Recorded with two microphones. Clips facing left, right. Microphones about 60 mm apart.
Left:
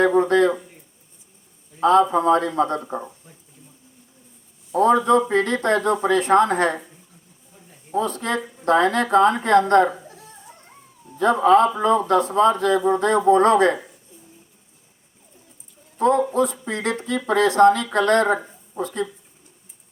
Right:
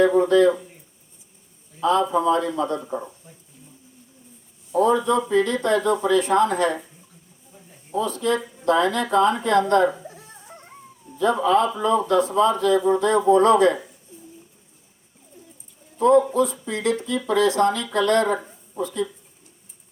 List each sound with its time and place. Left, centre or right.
0.0 s a man's voice: left
1.8 s a man's voice: left
4.7 s a man's voice: left
7.9 s a man's voice: left
11.2 s a man's voice: left
16.0 s a man's voice: left